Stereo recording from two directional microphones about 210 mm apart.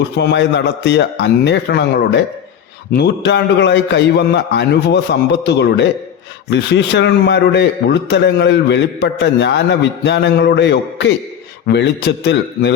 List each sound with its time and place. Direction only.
0.2 s a man's voice: 55° left (ahead or behind)